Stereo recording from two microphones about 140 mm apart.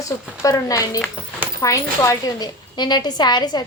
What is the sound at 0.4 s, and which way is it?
A woman's voice, 25° left (ahead or behind).